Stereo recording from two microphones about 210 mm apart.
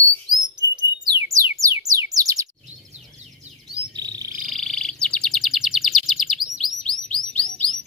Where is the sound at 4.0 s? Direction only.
20° right (ahead or behind).